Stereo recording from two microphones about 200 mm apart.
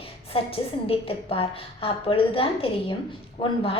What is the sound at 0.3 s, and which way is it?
A woman's voice, 30° left (ahead or behind).